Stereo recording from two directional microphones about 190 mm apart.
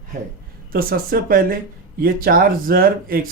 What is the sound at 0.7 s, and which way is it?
Speech, 50° right (ahead or behind).